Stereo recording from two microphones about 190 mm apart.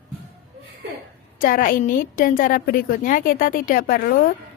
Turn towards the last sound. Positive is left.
turn(degrees=50)  # may be behind; listen again after turning